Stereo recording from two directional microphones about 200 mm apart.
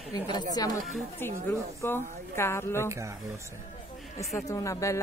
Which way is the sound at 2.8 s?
15° right (ahead or behind).